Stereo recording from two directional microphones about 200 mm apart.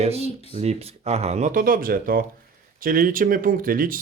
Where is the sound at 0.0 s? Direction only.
30° right (ahead or behind).